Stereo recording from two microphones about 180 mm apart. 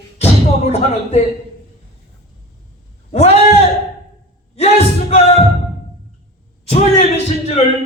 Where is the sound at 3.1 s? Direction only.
35° left (ahead or behind).